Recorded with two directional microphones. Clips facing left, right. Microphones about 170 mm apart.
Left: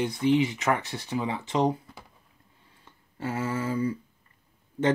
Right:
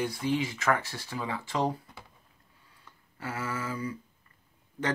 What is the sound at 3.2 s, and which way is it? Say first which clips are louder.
Speech: left 6 dB; 25° left (ahead or behind).